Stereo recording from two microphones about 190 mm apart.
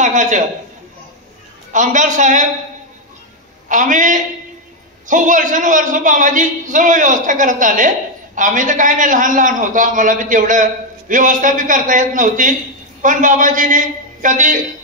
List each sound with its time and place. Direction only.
0.0 s a man's voice: 40° right (ahead or behind)
1.7 s a man's voice: 40° right (ahead or behind)
3.6 s a man's voice: 45° right (ahead or behind)